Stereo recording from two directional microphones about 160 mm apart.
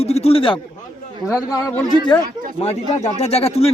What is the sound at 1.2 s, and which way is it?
Speech, 5° right (ahead or behind).